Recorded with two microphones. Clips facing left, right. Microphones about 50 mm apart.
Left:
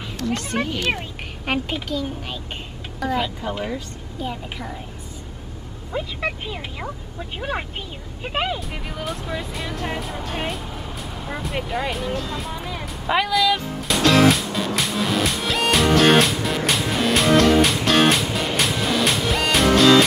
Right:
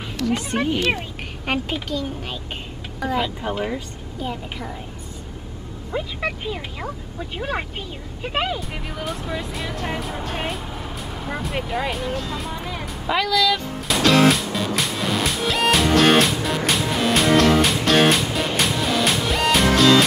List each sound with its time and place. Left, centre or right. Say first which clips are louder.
0.2 s a sound: right 3 dB; left
1.4 s speech: even; centre
5.9 s speech: even; centre
13.3 s speech: right 1 dB; centre
13.8 s music: even; centre